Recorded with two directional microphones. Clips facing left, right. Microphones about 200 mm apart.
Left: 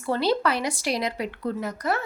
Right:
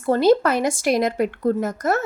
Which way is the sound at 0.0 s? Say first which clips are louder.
Right 7 dB; 45° right (ahead or behind).